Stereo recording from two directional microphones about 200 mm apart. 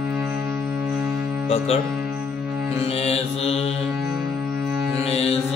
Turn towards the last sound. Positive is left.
turn(degrees=30)  # may be behind; listen again after turning